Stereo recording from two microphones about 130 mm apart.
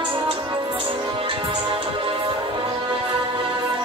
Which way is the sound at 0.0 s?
40° right (ahead or behind).